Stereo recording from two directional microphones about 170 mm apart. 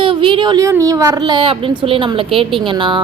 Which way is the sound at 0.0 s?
30° right (ahead or behind).